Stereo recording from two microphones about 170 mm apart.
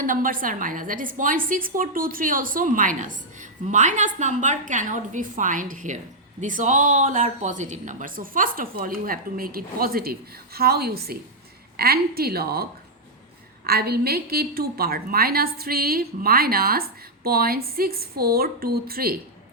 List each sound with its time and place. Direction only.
0.0 s a woman's voice: 55° right (ahead or behind)
13.7 s a woman's voice: 65° right (ahead or behind)